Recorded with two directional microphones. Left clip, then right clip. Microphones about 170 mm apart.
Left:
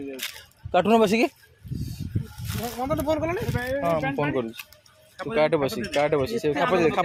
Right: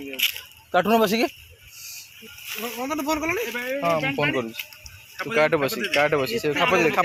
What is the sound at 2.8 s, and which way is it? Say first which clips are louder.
Speech: left 1 dB; 65° left (ahead or behind).